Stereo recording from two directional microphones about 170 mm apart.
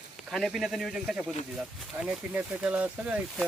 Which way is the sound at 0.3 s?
Centre (ahead or behind).